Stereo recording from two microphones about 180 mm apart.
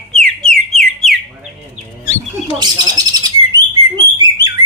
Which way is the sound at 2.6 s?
20° right (ahead or behind).